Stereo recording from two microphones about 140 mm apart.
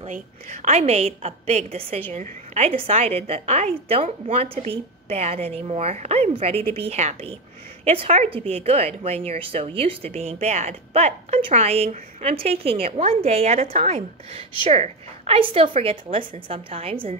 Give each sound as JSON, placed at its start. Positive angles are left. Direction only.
{"t": 0.1, "sound": "speech", "side_deg": -50}